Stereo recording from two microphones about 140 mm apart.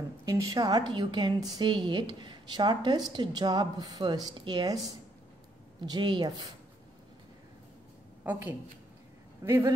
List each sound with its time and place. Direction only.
0.2 s a woman's voice: 25° right (ahead or behind)
8.2 s a woman's voice: 15° right (ahead or behind)